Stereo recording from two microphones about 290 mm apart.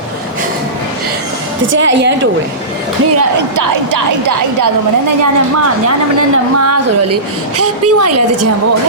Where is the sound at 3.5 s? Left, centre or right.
Right.